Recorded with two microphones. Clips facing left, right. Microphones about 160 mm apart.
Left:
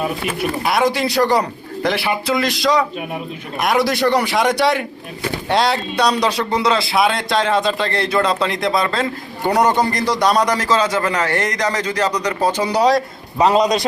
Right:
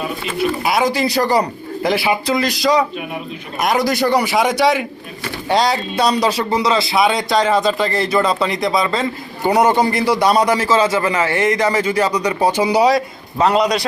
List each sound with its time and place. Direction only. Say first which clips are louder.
0.6 s speech: left 2 dB; centre (ahead or behind)
13.4 s a man's voice: left 1 dB; 20° left (ahead or behind)